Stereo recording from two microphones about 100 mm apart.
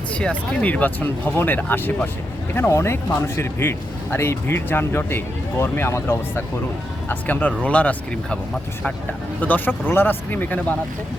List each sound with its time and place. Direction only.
0.1 s speech: 10° left (ahead or behind)
9.4 s speech: 20° left (ahead or behind)